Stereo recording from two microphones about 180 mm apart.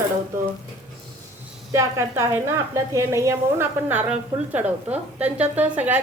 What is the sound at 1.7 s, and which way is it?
Speech, 15° right (ahead or behind).